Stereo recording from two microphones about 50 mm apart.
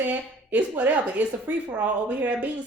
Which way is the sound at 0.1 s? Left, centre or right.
Right.